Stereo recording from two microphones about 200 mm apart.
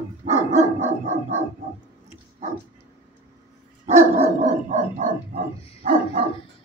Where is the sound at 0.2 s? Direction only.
35° right (ahead or behind).